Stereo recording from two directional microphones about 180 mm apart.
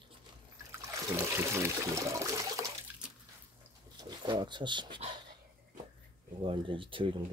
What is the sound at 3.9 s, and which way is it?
Speech, 25° right (ahead or behind).